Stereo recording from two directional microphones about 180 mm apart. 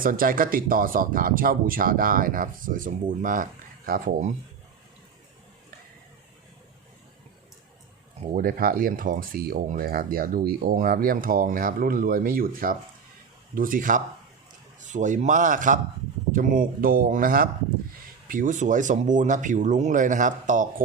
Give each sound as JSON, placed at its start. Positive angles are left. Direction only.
{"t": 0.0, "sound": "speech", "side_deg": -50}
{"t": 8.3, "sound": "speech", "side_deg": -50}